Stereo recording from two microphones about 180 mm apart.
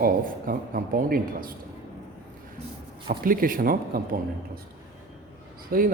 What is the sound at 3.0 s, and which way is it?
Speech, 55° right (ahead or behind).